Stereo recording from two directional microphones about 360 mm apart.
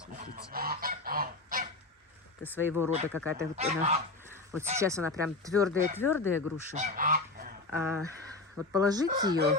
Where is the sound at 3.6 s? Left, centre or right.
Centre.